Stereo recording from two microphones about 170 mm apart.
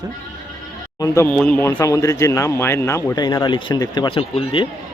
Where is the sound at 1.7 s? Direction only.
20° left (ahead or behind).